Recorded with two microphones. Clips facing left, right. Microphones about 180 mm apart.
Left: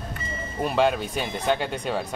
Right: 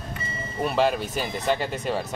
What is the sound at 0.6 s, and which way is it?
Speech, centre (ahead or behind).